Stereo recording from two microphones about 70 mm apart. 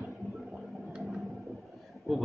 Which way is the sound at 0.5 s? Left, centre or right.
Centre.